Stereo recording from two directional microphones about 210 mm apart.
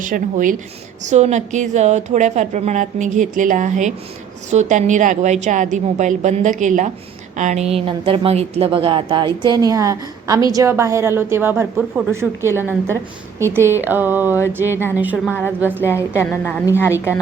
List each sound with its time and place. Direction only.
0.0 s a woman's voice: 40° right (ahead or behind); by 15.4 s 5° right (ahead or behind)
15.8 s a woman's voice: 10° left (ahead or behind)